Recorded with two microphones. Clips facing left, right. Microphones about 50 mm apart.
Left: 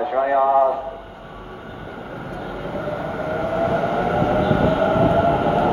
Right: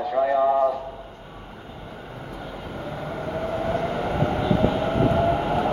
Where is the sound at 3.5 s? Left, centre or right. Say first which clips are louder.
Left 6 dB; left.